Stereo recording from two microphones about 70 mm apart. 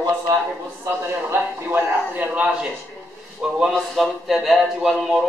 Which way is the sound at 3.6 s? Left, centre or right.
Centre.